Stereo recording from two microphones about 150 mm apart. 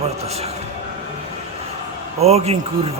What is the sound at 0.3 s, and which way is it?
Speech, 45° right (ahead or behind).